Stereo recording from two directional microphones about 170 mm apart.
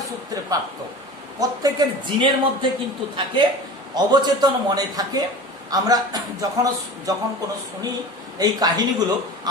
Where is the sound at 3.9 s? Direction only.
25° right (ahead or behind).